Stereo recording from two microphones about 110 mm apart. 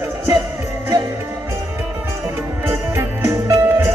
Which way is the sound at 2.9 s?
25° right (ahead or behind).